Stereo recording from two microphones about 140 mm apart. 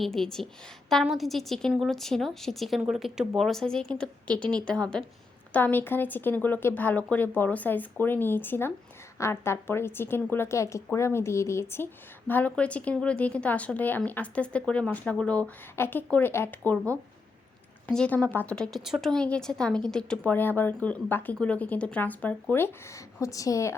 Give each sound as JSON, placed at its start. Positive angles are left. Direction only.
{"t": 0.0, "sound": "a woman's voice", "side_deg": 5}
{"t": 17.8, "sound": "a woman's voice", "side_deg": 10}
{"t": 23.2, "sound": "a woman's voice", "side_deg": 25}